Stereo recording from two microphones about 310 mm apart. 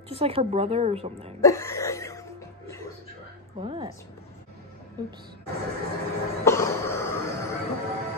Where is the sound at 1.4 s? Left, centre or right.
Centre.